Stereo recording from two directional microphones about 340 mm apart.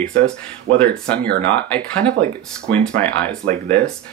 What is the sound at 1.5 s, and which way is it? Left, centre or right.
Speech, centre.